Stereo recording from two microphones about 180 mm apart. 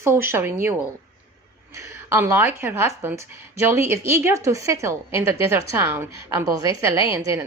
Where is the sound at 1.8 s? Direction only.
15° right (ahead or behind).